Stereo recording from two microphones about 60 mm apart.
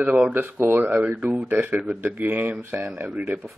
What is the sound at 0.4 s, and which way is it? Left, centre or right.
Speech, right.